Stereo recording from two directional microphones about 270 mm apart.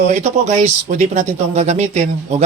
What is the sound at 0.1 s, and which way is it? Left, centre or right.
Speech, right.